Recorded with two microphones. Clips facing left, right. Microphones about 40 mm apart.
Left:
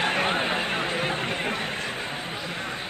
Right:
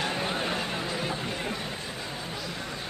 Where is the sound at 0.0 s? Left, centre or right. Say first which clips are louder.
Left 6 dB; left.